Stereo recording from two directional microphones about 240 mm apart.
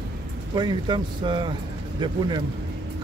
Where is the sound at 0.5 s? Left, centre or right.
Centre.